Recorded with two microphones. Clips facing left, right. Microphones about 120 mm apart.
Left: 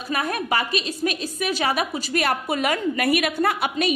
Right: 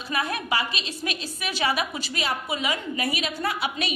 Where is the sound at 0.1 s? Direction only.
45° left (ahead or behind).